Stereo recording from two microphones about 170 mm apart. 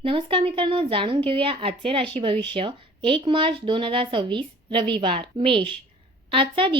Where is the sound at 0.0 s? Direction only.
30° right (ahead or behind).